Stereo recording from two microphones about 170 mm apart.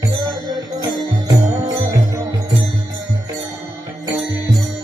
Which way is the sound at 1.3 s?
20° right (ahead or behind).